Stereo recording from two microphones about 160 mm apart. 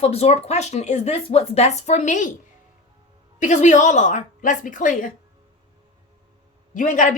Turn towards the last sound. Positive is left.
turn(degrees=50)  # may be behind; listen again after turning